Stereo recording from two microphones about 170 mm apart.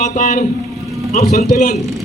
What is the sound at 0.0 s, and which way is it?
A man's voice, 45° left (ahead or behind).